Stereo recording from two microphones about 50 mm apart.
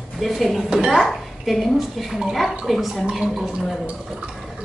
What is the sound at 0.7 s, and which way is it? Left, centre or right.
Speech, centre.